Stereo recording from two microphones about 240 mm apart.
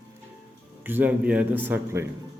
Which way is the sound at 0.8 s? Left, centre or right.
Centre.